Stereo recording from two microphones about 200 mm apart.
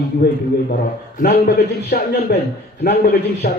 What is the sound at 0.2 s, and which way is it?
Speech, 55° left (ahead or behind).